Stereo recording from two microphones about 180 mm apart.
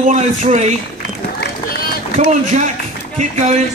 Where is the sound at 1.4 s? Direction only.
60° left (ahead or behind).